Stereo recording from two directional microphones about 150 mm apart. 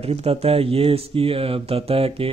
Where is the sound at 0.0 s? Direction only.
40° right (ahead or behind).